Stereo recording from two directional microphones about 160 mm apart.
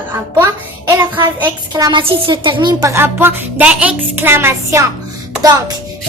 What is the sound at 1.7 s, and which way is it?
A woman's voice, 25° right (ahead or behind).